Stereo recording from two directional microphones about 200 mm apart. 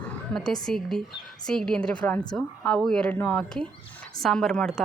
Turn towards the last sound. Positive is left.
turn(degrees=5)  # may be behind; listen again after turning